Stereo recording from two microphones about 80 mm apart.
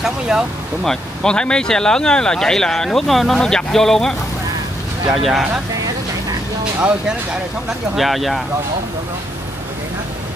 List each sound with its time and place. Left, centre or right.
0.0 s speech: centre
0.8 s speech: centre
5.1 s speech: centre
7.9 s speech: centre